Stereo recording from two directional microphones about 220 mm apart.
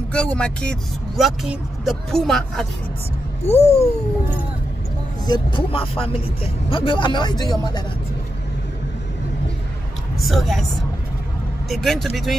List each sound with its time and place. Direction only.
0.1 s speech: 5° left (ahead or behind)
3.4 s speech: 30° left (ahead or behind)
5.2 s speech: 20° left (ahead or behind)
10.1 s speech: centre (ahead or behind)
11.7 s speech: centre (ahead or behind)